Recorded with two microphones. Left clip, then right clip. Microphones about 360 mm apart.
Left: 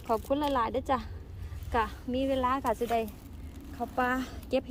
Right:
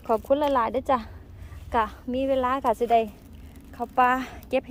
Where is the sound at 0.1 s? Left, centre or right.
Centre.